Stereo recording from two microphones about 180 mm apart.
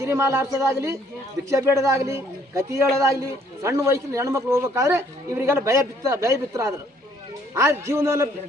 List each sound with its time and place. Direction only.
0.0 s a man's voice: 15° right (ahead or behind)